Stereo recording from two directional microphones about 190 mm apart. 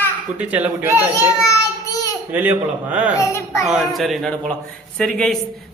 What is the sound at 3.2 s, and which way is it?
Speech, 15° left (ahead or behind).